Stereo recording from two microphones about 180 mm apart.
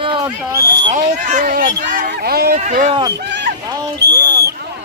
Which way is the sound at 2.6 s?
45° right (ahead or behind).